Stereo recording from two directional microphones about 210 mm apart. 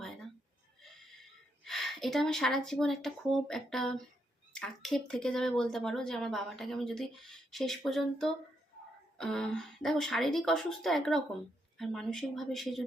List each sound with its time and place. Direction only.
1.6 s speech: centre (ahead or behind)